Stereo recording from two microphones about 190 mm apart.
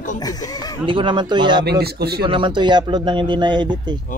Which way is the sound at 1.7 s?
55° right (ahead or behind).